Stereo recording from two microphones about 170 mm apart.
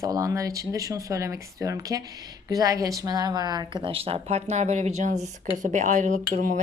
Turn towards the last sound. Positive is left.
turn(degrees=-50)  # may be behind; listen again after turning